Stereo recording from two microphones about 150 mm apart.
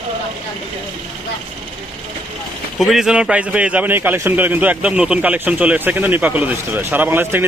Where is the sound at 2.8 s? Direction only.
Centre (ahead or behind).